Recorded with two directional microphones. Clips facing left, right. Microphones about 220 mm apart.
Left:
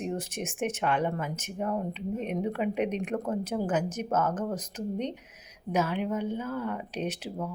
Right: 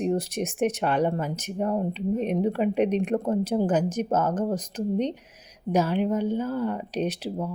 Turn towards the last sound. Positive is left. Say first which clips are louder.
# right 5 dB
turn(degrees=-35)  # may be behind; listen again after turning